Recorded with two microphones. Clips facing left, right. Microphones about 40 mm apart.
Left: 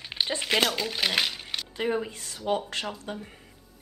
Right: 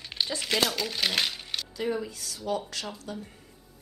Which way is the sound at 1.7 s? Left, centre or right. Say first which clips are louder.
Left 3 dB; left.